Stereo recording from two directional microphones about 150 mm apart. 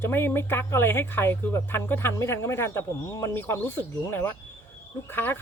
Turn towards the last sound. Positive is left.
turn(degrees=15)  # may be behind; listen again after turning